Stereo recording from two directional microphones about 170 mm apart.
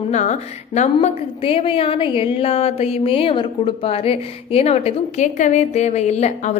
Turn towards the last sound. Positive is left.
turn(degrees=40)  # may be behind; listen again after turning